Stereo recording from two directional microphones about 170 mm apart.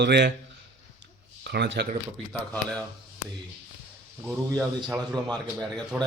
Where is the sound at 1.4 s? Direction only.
90° right.